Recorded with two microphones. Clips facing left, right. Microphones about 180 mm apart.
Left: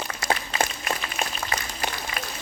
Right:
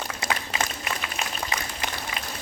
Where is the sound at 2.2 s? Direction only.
20° right (ahead or behind).